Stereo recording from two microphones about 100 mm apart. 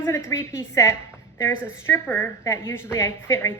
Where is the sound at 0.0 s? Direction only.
25° left (ahead or behind).